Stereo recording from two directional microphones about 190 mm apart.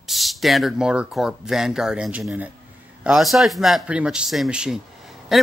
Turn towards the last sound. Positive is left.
turn(degrees=0)  # may be behind; listen again after turning